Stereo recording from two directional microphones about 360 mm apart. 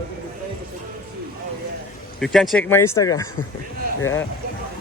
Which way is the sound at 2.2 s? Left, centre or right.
Centre.